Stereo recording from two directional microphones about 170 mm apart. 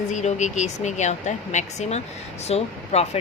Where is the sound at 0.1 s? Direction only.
45° left (ahead or behind).